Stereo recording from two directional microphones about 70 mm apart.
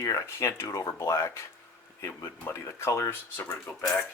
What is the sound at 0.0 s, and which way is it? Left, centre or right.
Speech, left.